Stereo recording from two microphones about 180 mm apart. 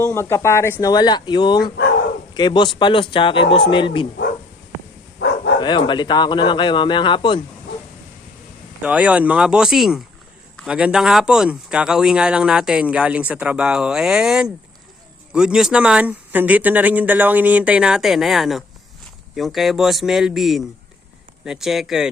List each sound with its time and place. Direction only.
0.0 s speech: 15° left (ahead or behind)
5.5 s speech: 25° left (ahead or behind)
8.8 s speech: 5° right (ahead or behind)